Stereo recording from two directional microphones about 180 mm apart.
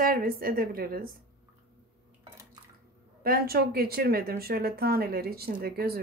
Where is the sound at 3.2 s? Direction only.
55° right (ahead or behind).